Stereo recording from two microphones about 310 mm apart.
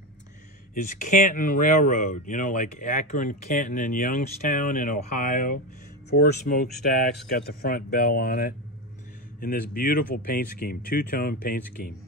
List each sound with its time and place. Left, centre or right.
0.7 s speech: left